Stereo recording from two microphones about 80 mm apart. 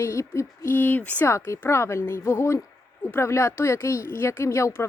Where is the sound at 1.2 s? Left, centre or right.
Left.